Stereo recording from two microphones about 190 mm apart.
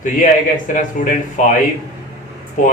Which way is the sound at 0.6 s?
40° left (ahead or behind).